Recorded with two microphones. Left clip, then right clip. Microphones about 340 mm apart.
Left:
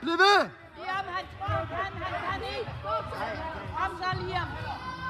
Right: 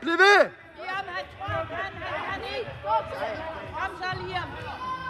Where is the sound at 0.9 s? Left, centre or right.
Left.